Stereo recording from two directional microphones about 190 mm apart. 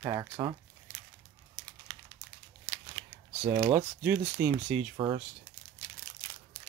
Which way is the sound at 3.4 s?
25° right (ahead or behind).